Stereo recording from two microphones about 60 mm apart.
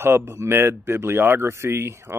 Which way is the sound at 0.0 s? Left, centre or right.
Right.